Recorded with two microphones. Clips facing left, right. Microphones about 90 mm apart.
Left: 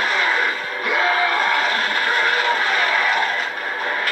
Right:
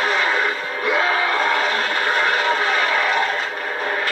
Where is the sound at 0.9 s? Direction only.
25° right (ahead or behind).